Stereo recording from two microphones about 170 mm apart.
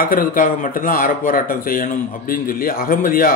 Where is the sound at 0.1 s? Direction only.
55° left (ahead or behind).